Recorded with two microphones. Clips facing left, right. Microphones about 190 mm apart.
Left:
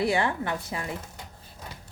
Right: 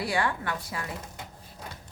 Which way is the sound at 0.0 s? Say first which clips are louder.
Left 3 dB; 25° left (ahead or behind).